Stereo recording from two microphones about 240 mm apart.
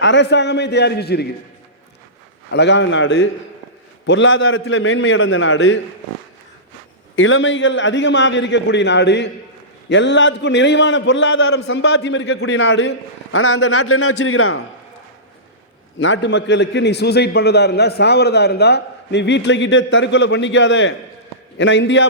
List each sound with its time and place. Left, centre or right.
0.0 s a man's voice: left
2.5 s a man's voice: left
7.2 s a man's voice: left
16.0 s a man's voice: left